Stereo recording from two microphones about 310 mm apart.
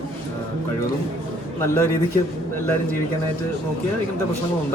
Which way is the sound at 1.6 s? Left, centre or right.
Centre.